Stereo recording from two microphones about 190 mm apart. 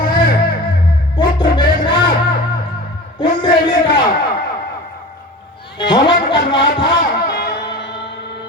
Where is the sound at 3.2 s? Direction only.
25° left (ahead or behind).